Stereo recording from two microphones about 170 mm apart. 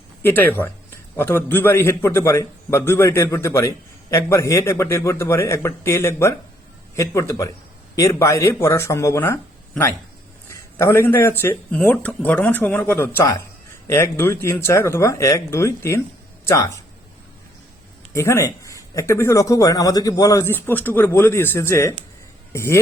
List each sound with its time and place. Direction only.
0.2 s a man's voice: 10° left (ahead or behind)
18.1 s a man's voice: 15° left (ahead or behind)